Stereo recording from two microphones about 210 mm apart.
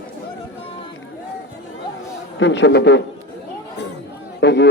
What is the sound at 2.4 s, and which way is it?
Speech, 55° left (ahead or behind).